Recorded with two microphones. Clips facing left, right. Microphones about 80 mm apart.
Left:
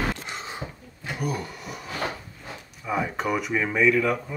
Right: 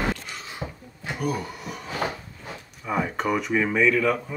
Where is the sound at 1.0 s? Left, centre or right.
Centre.